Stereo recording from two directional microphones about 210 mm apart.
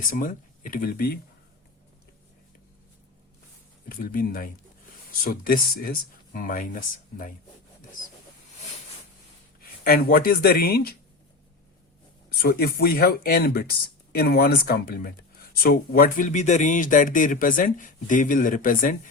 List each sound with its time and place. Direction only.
0.1 s speech: 40° left (ahead or behind)
3.8 s speech: 40° left (ahead or behind)
9.8 s speech: 45° left (ahead or behind)
12.4 s speech: 45° left (ahead or behind)